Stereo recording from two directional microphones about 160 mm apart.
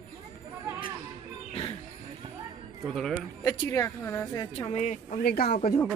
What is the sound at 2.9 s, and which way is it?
Speech, 5° left (ahead or behind).